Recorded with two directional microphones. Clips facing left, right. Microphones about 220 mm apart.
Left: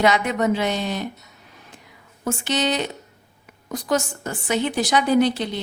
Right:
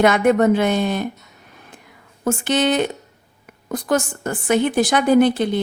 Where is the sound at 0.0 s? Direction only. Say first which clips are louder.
Right 5 dB; 50° right (ahead or behind).